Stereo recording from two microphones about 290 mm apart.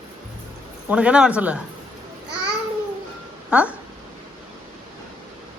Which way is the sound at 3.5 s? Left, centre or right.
Centre.